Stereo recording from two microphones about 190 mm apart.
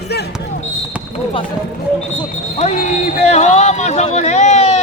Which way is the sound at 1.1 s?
25° left (ahead or behind).